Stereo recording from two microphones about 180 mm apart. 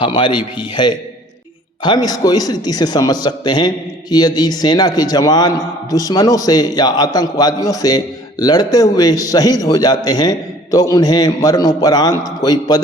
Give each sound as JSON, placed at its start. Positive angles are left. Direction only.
{"t": 0.0, "sound": "a man's voice", "side_deg": 25}